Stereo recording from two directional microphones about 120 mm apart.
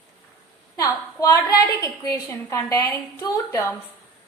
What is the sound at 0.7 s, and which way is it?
A woman's voice, 30° left (ahead or behind).